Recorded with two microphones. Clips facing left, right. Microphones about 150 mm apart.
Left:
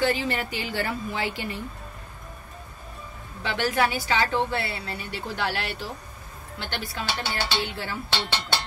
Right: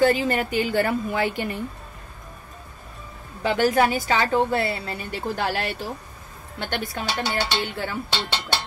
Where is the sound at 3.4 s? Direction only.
45° right (ahead or behind).